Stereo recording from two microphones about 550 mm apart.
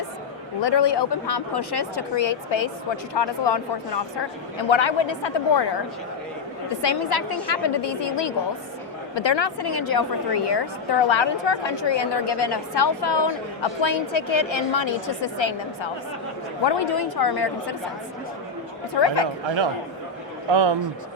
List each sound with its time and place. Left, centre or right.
0.6 s a woman's voice: left
6.8 s a woman's voice: left
18.9 s a woman's voice: left
20.5 s speech: right